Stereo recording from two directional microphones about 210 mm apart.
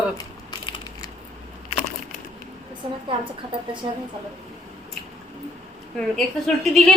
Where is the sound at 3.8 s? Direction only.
25° right (ahead or behind).